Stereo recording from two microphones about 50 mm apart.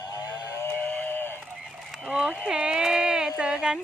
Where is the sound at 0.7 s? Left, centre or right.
Left.